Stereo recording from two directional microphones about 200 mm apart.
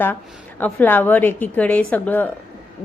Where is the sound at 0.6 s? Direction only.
10° left (ahead or behind).